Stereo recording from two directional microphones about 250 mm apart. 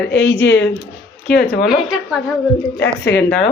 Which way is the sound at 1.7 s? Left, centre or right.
Centre.